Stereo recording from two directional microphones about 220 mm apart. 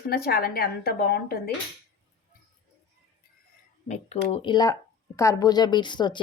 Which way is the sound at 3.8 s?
30° left (ahead or behind).